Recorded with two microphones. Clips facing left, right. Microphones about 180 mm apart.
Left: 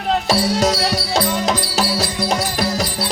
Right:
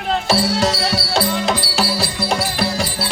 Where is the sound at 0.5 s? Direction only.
40° left (ahead or behind).